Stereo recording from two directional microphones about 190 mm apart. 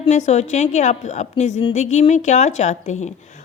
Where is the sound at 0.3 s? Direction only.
35° left (ahead or behind).